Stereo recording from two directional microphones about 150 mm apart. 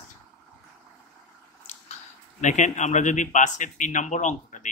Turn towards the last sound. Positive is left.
turn(degrees=55)  # may be behind; listen again after turning